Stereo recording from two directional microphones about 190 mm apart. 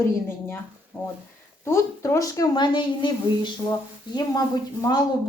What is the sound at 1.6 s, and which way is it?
Speech, 15° left (ahead or behind).